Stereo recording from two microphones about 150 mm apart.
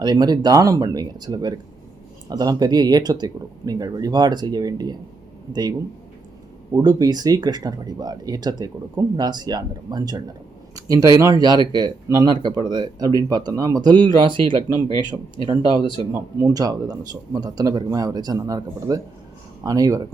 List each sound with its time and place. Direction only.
0.0 s speech: 25° right (ahead or behind)
6.7 s speech: 25° right (ahead or behind)
16.1 s speech: 20° right (ahead or behind)